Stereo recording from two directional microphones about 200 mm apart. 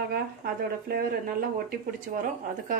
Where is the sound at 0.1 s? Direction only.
50° right (ahead or behind).